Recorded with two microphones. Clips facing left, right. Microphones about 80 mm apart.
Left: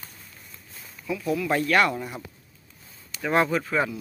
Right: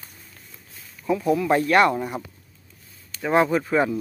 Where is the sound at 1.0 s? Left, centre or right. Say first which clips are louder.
Right 6 dB; right.